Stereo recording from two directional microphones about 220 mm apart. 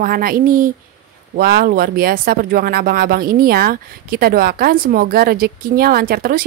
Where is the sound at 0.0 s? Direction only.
40° right (ahead or behind).